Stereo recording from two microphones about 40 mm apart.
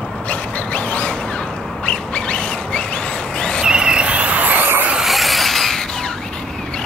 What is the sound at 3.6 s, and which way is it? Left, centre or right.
Vehicle, right.